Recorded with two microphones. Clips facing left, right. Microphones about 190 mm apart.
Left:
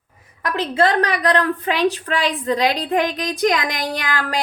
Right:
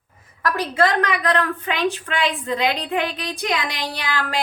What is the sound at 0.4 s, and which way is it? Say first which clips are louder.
Speech: left 1 dB; 20° left (ahead or behind).